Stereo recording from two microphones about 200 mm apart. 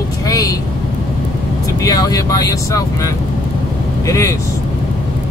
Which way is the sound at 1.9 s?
15° left (ahead or behind).